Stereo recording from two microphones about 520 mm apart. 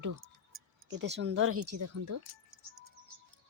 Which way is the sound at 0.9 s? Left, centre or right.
Right.